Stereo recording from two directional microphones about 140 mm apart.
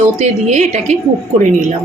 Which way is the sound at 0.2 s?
55° right (ahead or behind).